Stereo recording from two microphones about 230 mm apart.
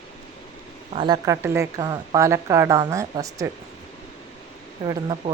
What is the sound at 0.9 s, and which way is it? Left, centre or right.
Speech, centre.